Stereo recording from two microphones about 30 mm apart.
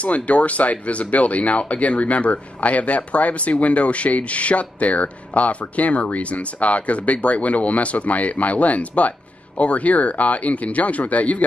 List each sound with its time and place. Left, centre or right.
0.0 s speech: left